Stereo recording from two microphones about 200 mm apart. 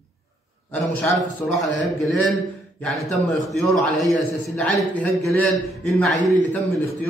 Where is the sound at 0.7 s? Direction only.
Centre (ahead or behind).